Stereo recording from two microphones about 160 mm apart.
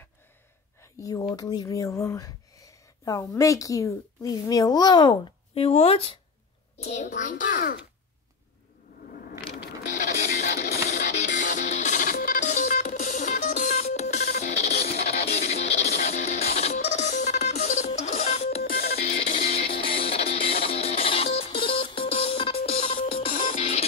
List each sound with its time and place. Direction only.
1.3 s a child's voice: 25° left (ahead or behind); by 7.7 s 55° left (ahead or behind)
9.6 s printer: 75° left (ahead or behind)
10.0 s music: 50° left (ahead or behind)
18.6 s music: 75° left (ahead or behind)
18.9 s music: 45° left (ahead or behind)
23.3 s music: 55° left (ahead or behind)